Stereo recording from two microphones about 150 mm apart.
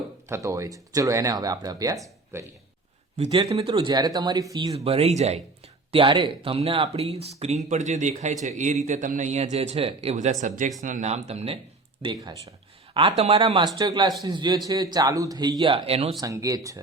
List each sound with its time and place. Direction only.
0.3 s speech: 20° right (ahead or behind)
3.2 s speech: 45° right (ahead or behind)
3.7 s speech: 35° right (ahead or behind)
4.7 s speech: 40° right (ahead or behind)
5.9 s speech: 35° right (ahead or behind)
13.7 s speech: 25° right (ahead or behind)
16.2 s speech: 25° right (ahead or behind)